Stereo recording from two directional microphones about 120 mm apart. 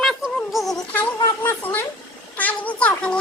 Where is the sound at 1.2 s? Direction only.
25° left (ahead or behind).